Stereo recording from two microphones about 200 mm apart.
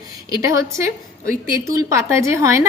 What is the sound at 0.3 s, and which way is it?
A woman's voice, 15° right (ahead or behind).